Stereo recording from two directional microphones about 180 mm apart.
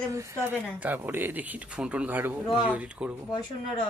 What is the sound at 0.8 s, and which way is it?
A woman's voice, 10° right (ahead or behind).